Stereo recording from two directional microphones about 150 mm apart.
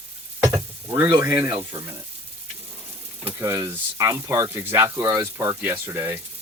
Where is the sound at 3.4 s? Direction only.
20° right (ahead or behind).